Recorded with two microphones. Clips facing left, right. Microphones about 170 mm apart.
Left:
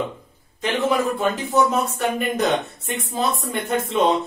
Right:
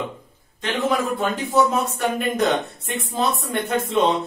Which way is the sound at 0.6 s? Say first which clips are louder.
Left 1 dB; centre (ahead or behind).